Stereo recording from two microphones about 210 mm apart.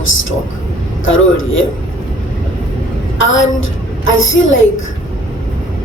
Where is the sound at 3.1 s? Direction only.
65° left (ahead or behind).